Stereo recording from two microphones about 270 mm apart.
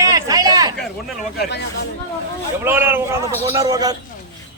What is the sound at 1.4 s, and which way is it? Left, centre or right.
Speech, left.